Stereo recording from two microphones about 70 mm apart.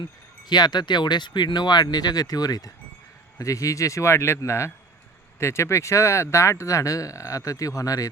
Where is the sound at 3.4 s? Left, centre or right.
Left.